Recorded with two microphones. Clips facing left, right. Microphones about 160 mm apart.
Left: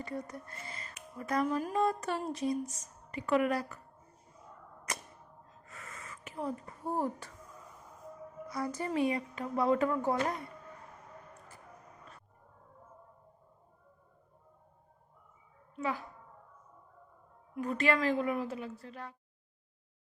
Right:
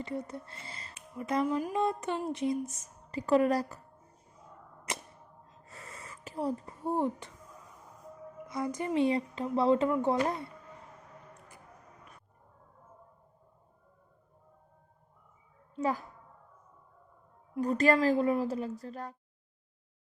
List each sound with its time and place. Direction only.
0.0 s speech: 25° right (ahead or behind)
1.1 s speech: 20° right (ahead or behind)
3.1 s a woman's voice: 35° right (ahead or behind)
5.6 s gasp: 30° right (ahead or behind)
8.4 s speech: 20° right (ahead or behind)
15.7 s a child's voice: 40° right (ahead or behind)
17.5 s a woman's voice: 35° right (ahead or behind)